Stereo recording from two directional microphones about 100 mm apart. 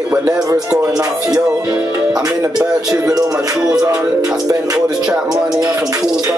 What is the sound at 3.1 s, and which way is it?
Music, 35° right (ahead or behind).